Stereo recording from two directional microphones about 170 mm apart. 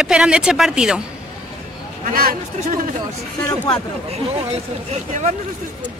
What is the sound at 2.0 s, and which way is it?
Speech, 55° right (ahead or behind).